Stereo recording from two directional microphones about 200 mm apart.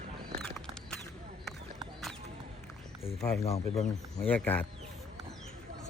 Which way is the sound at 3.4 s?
30° left (ahead or behind).